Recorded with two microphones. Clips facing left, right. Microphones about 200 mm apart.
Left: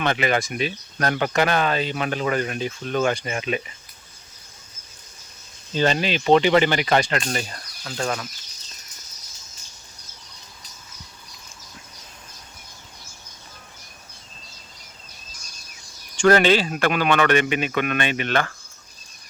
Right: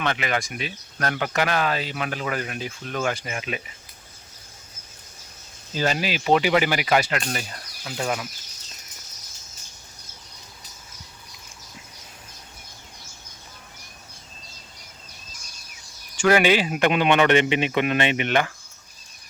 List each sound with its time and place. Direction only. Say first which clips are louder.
0.0 s speech: left 4 dB; 35° left (ahead or behind)
1.3 s speech: left 1 dB; 5° right (ahead or behind)
5.7 s speech: left 3 dB; 5° right (ahead or behind)
16.1 s a man's voice: left 2 dB; 10° right (ahead or behind)